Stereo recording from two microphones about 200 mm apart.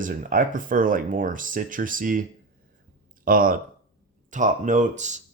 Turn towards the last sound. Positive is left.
turn(degrees=-35)  # may be behind; listen again after turning